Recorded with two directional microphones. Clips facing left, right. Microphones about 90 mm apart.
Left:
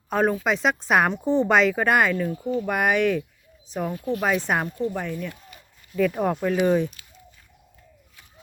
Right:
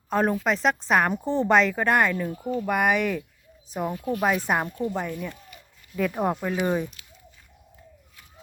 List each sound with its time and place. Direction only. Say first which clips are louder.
0.1 s a woman's voice: left 1 dB; centre (ahead or behind)
2.1 s a woman's voice: left 3 dB; 5° right (ahead or behind)
4.8 s speech: left 1 dB; 15° right (ahead or behind)